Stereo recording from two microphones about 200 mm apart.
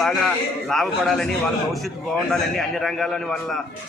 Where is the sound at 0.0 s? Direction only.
Centre (ahead or behind).